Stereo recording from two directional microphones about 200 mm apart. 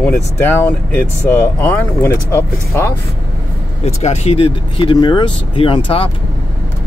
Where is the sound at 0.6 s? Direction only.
10° left (ahead or behind).